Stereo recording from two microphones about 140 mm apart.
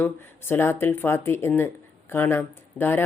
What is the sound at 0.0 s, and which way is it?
Speech, 15° left (ahead or behind).